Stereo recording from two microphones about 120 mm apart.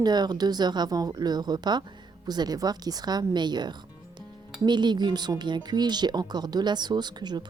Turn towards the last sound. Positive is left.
turn(degrees=-35)  # may be behind; listen again after turning